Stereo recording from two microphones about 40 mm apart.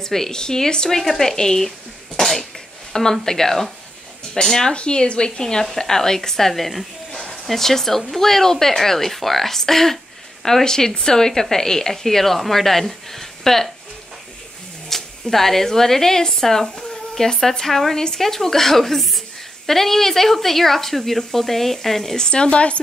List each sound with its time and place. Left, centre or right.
0.0 s speech: centre
0.8 s speech: centre
2.1 s cough: centre
2.9 s speech: centre
4.7 s a woman's voice: left
5.4 s speech: centre
14.9 s speech: centre
22.1 s a woman's voice: left